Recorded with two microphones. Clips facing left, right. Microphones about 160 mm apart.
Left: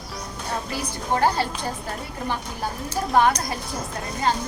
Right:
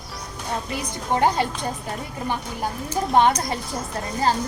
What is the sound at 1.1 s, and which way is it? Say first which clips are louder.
Speech: right 1 dB; 20° right (ahead or behind).